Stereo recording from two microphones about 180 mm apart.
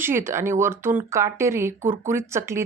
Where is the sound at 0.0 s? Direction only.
15° right (ahead or behind).